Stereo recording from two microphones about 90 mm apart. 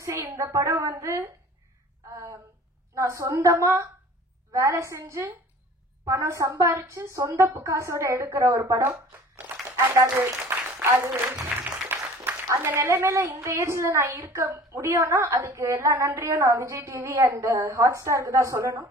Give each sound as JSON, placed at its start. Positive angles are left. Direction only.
{"t": 0.0, "sound": "a woman's voice", "side_deg": -30}
{"t": 2.9, "sound": "a woman's voice", "side_deg": -35}
{"t": 10.0, "sound": "a sound", "side_deg": -20}
{"t": 11.5, "sound": "music", "side_deg": -5}
{"t": 12.4, "sound": "a woman's voice", "side_deg": -30}